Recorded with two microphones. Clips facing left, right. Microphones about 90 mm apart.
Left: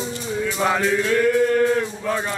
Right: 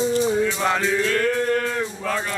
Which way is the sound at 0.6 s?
5° left (ahead or behind).